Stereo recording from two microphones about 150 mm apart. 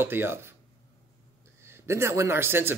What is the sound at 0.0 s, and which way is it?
Speech, 15° right (ahead or behind).